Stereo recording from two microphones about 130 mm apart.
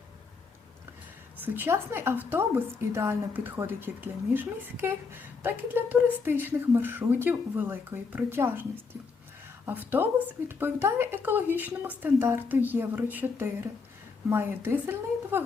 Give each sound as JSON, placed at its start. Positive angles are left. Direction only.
{"t": 1.4, "sound": "a woman's voice", "side_deg": -15}